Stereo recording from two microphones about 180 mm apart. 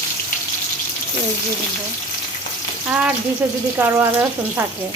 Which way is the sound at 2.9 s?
5° right (ahead or behind).